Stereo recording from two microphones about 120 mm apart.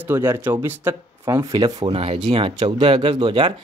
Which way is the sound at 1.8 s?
55° right (ahead or behind).